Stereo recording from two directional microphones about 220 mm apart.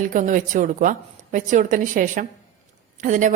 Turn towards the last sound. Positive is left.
turn(degrees=-35)  # may be behind; listen again after turning